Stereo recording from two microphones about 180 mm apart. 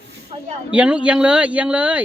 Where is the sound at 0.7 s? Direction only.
5° right (ahead or behind).